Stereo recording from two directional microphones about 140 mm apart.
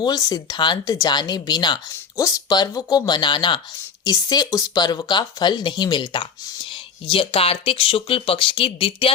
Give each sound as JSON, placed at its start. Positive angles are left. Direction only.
{"t": 0.0, "sound": "speech", "side_deg": 25}